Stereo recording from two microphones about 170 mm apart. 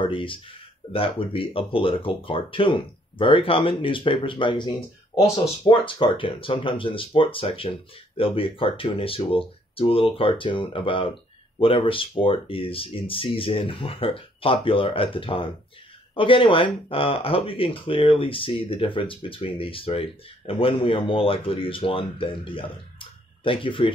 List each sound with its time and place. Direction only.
0.0 s speech: 30° left (ahead or behind)